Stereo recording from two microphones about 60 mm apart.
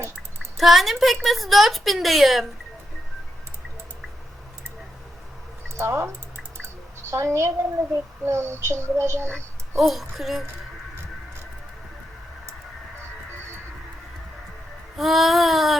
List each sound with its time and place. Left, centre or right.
0.5 s a woman's voice: centre
5.7 s speech: right
7.1 s child singing: right
9.7 s a woman's voice: centre
14.9 s a woman's voice: centre